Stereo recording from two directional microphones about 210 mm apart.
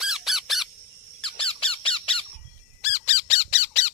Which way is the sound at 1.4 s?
25° left (ahead or behind).